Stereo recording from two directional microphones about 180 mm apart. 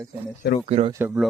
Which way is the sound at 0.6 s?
35° right (ahead or behind).